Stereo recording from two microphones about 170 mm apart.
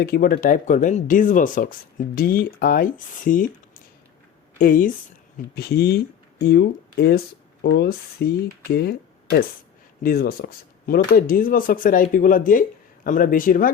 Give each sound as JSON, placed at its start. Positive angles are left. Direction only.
{"t": 0.0, "sound": "speech", "side_deg": 60}
{"t": 4.5, "sound": "speech", "side_deg": 55}
{"t": 5.5, "sound": "speech", "side_deg": 65}